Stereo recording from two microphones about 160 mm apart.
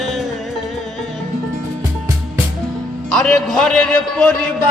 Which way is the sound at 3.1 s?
5° left (ahead or behind).